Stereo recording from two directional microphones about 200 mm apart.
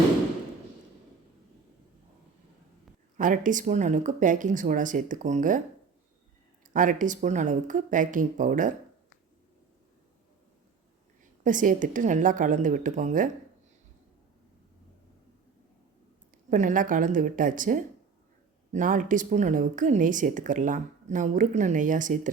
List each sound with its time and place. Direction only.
3.2 s speech: 40° right (ahead or behind)
6.7 s speech: 40° right (ahead or behind)
11.4 s speech: 40° right (ahead or behind)
16.5 s speech: 40° right (ahead or behind)